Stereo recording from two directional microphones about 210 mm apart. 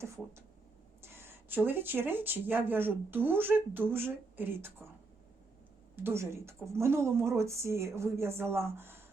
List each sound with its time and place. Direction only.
1.0 s speech: 10° right (ahead or behind)
6.0 s speech: 10° right (ahead or behind)